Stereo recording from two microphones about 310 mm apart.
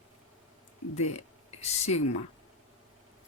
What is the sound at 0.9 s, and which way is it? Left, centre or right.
Speech, left.